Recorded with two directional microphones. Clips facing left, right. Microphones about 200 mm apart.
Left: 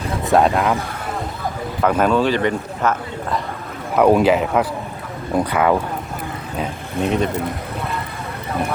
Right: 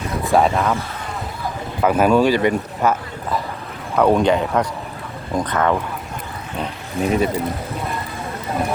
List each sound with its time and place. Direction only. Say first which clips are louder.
0.3 s speech: left 1 dB; centre (ahead or behind)
1.8 s speech: right 2 dB; 10° right (ahead or behind)
3.9 s speech: left 2 dB; 10° left (ahead or behind)
7.0 s speech: right 1 dB; 5° right (ahead or behind)